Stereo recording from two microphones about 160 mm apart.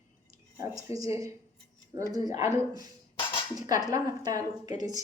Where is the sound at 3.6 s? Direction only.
25° right (ahead or behind).